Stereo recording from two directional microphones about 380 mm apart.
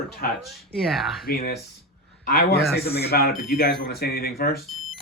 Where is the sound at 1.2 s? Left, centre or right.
Left.